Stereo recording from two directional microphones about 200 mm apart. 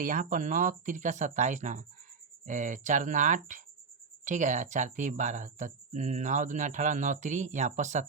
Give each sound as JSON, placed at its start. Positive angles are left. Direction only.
{"t": 0.0, "sound": "speech", "side_deg": -40}